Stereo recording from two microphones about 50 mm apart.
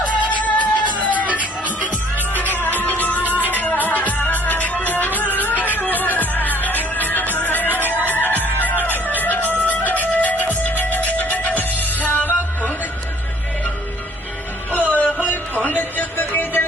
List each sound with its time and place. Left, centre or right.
0.0 s music: left
1.3 s music: right
2.1 s music: left
14.7 s music: left